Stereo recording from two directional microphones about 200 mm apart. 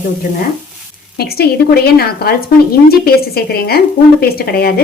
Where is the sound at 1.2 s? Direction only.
50° left (ahead or behind).